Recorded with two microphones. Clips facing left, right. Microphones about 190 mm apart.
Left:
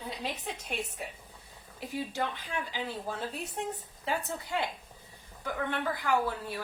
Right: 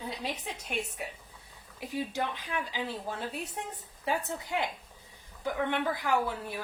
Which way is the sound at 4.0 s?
15° right (ahead or behind).